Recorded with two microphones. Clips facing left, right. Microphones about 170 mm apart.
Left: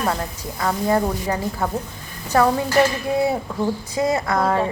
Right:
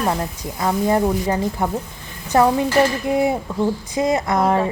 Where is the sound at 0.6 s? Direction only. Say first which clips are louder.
Right 2 dB; 20° right (ahead or behind).